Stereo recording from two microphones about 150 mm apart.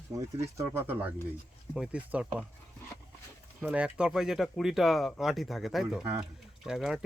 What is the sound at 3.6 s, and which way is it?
Speech, 10° right (ahead or behind).